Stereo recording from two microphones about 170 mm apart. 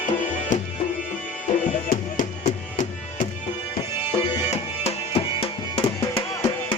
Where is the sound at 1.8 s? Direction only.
50° left (ahead or behind).